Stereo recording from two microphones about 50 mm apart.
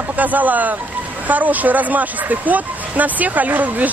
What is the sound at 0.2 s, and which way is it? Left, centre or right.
Speech, right.